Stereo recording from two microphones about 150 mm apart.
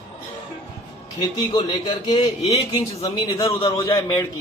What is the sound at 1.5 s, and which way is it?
A man's voice, 30° left (ahead or behind).